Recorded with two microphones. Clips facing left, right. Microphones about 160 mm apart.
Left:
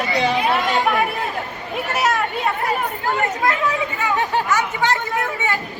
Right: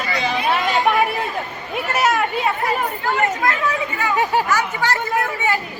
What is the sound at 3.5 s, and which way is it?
Speech, 20° left (ahead or behind).